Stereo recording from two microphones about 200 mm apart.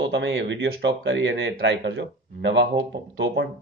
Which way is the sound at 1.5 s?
60° right (ahead or behind).